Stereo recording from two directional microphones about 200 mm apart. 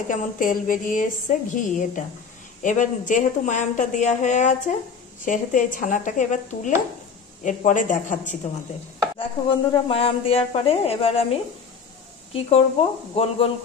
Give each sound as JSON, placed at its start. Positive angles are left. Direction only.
{"t": 0.1, "sound": "speech", "side_deg": 40}
{"t": 9.2, "sound": "speech", "side_deg": 25}
{"t": 12.3, "sound": "speech", "side_deg": 30}